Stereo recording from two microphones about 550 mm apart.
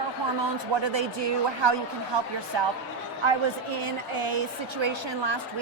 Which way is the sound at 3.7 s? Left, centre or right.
Right.